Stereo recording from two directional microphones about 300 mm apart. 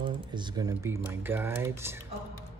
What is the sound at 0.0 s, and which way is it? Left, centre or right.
Speech, centre.